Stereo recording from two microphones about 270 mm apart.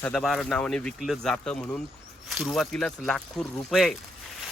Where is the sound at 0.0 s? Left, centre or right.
Centre.